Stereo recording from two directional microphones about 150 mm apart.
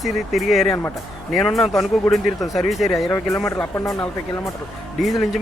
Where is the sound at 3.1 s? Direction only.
20° left (ahead or behind).